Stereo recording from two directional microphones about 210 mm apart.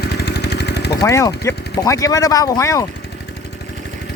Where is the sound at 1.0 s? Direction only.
15° left (ahead or behind).